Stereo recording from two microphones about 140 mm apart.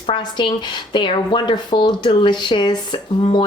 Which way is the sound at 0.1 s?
35° left (ahead or behind).